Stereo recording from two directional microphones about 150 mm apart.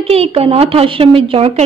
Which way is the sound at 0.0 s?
40° right (ahead or behind).